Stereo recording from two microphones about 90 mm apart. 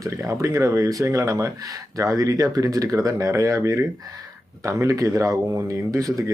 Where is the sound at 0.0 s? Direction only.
35° right (ahead or behind).